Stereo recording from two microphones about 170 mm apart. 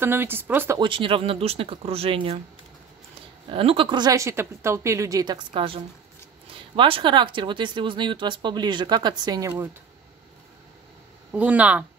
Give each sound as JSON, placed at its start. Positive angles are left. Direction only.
{"t": 0.0, "sound": "speech", "side_deg": -10}
{"t": 0.7, "sound": "speech", "side_deg": -30}
{"t": 3.4, "sound": "speech", "side_deg": -30}
{"t": 11.3, "sound": "speech", "side_deg": -10}